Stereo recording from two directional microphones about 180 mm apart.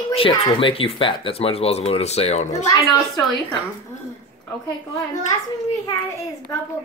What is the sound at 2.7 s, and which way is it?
Speech, 20° left (ahead or behind).